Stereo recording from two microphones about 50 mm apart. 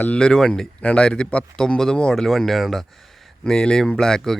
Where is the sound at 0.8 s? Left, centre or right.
Left; by 2.8 s centre.